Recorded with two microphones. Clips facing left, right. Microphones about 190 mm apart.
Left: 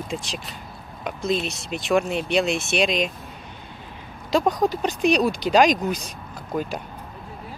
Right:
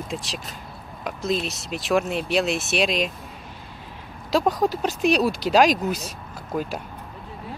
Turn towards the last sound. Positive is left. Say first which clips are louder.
# left 1 dB
turn(degrees=0)  # may be behind; listen again after turning